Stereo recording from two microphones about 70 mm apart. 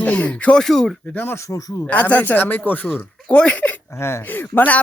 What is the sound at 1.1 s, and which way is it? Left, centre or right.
Speech, left.